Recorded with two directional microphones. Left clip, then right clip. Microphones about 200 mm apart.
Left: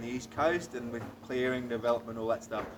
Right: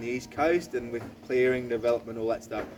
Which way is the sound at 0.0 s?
20° right (ahead or behind).